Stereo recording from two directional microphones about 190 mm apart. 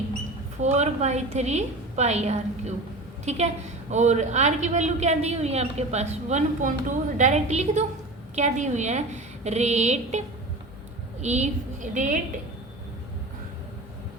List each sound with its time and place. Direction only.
0.6 s a woman's voice: 35° right (ahead or behind)